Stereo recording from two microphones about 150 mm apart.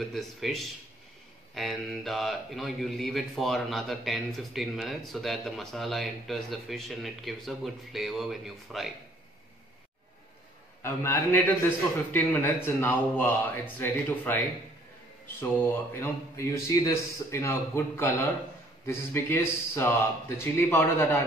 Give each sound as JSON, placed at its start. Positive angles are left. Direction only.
{"t": 0.1, "sound": "speech", "side_deg": 0}
{"t": 10.8, "sound": "a man's voice", "side_deg": 15}
{"t": 15.5, "sound": "a man's voice", "side_deg": 15}